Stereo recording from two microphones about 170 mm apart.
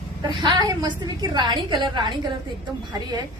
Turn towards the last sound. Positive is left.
turn(degrees=-25)  # may be behind; listen again after turning